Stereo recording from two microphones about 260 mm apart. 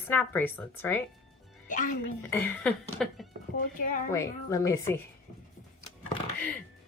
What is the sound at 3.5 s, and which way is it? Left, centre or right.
Speech, left.